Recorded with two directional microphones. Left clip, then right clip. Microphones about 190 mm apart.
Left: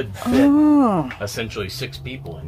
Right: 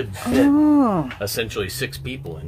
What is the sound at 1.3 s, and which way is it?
Speech, 40° right (ahead or behind).